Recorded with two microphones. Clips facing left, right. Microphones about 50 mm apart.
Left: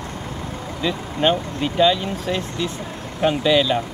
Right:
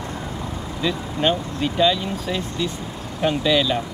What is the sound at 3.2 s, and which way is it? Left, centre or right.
Speech, centre.